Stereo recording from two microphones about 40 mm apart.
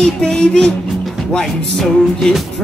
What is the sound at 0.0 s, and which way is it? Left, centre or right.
Music, centre.